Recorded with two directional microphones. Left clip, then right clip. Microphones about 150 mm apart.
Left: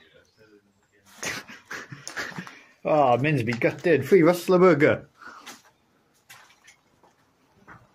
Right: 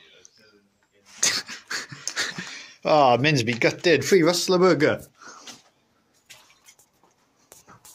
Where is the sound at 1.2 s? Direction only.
20° right (ahead or behind).